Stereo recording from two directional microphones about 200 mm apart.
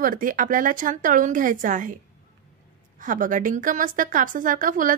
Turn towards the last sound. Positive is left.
turn(degrees=-45)  # may be behind; listen again after turning